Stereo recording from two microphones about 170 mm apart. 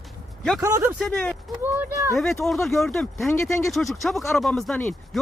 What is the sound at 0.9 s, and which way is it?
Speech, centre (ahead or behind).